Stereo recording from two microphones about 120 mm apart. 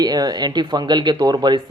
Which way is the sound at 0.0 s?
35° right (ahead or behind).